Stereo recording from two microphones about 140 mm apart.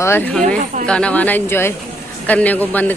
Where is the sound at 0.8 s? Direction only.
5° left (ahead or behind).